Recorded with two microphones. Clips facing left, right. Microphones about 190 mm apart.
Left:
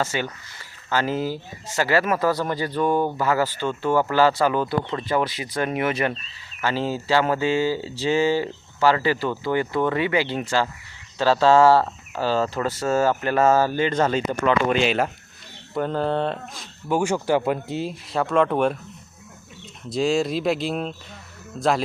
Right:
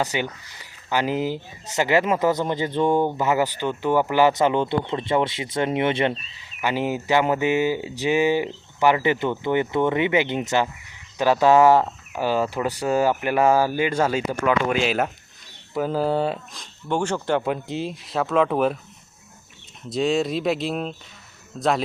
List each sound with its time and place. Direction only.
0.0 s speech: 15° right (ahead or behind)
6.6 s speech: 15° right (ahead or behind)
16.9 s speech: 10° left (ahead or behind)
19.9 s speech: centre (ahead or behind)